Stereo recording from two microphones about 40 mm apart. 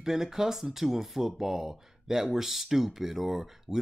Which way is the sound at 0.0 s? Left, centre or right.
Centre.